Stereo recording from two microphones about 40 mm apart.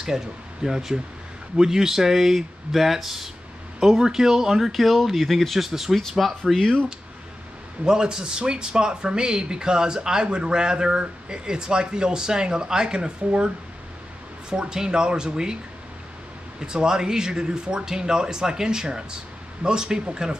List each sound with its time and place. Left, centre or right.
0.0 s speech: centre
5.7 s speech: centre
7.8 s speech: centre
14.5 s speech: centre
16.5 s speech: centre